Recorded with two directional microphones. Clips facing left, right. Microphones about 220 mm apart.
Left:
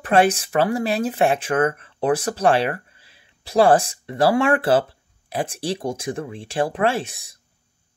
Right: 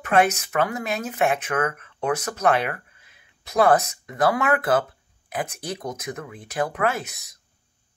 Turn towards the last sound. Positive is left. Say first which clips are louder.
# left 4 dB
turn(degrees=30)  # may be behind; listen again after turning